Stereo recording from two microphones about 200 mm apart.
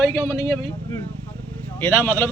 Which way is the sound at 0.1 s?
15° left (ahead or behind).